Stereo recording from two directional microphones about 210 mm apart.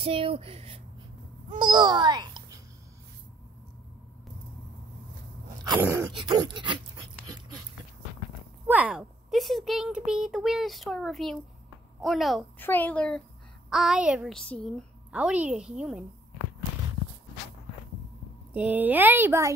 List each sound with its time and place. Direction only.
0.0 s a child's voice: 25° right (ahead or behind)
5.8 s speech: 10° right (ahead or behind)
8.6 s speech: 5° right (ahead or behind)
18.5 s speech: 10° right (ahead or behind)